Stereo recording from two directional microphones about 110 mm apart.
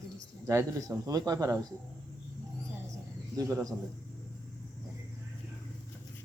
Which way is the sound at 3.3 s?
30° right (ahead or behind).